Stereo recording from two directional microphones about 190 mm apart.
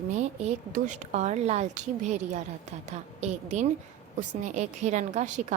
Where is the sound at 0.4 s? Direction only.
40° right (ahead or behind).